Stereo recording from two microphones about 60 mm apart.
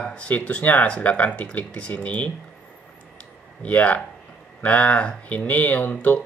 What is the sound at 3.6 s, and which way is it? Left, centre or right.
Speech, left.